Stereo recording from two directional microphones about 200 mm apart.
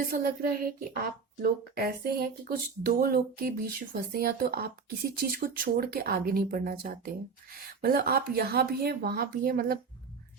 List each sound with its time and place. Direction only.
0.0 s speech: 45° right (ahead or behind)